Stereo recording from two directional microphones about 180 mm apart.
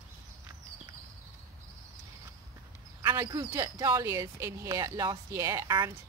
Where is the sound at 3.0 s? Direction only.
15° right (ahead or behind).